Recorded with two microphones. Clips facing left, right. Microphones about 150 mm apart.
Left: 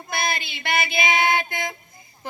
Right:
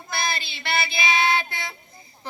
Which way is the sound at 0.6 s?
50° left (ahead or behind).